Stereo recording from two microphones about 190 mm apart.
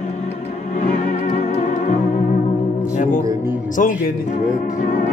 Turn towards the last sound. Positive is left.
turn(degrees=45)  # may be behind; listen again after turning